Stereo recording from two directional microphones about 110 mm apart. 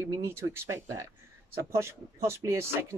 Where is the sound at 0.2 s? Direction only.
20° right (ahead or behind).